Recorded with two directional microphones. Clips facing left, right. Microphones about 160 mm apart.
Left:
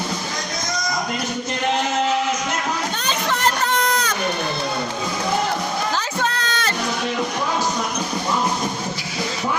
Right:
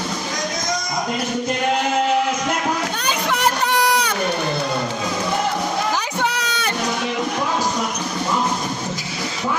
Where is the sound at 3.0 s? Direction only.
15° right (ahead or behind).